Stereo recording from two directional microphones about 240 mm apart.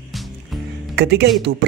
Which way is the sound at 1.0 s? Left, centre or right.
Right.